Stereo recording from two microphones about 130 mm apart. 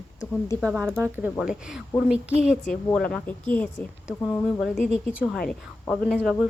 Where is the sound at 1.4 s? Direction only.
5° right (ahead or behind).